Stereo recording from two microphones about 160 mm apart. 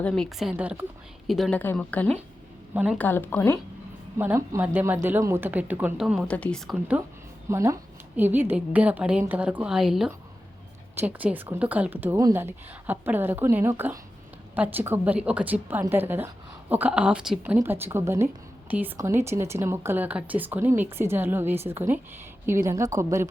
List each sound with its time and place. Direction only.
0.0 s a woman's voice: centre (ahead or behind)
1.3 s a woman's voice: 5° left (ahead or behind)
2.7 s speech: 10° right (ahead or behind)
3.0 s speech: 10° left (ahead or behind)
4.2 s speech: 15° right (ahead or behind); by 6.7 s 5° left (ahead or behind)
7.5 s a woman's voice: 15° right (ahead or behind)